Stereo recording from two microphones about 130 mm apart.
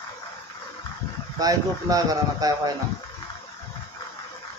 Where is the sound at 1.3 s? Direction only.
30° right (ahead or behind).